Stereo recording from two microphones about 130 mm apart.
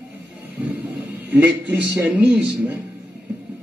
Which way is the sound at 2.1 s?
10° right (ahead or behind).